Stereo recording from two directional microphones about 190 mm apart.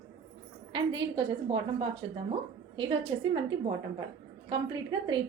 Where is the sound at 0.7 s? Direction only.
25° right (ahead or behind).